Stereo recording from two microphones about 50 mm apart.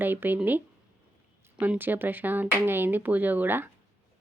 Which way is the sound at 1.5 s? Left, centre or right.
Right.